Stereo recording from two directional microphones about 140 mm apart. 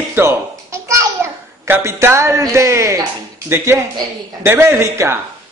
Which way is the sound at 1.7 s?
20° right (ahead or behind).